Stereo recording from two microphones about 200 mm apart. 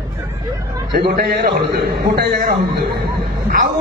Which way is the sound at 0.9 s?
50° right (ahead or behind).